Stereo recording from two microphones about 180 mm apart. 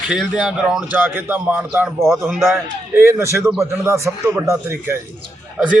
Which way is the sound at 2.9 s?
15° right (ahead or behind).